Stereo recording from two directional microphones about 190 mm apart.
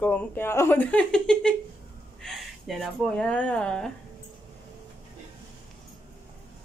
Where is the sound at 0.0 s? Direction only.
10° left (ahead or behind).